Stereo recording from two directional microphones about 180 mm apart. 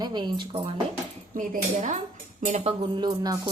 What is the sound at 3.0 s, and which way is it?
Speech, 25° right (ahead or behind).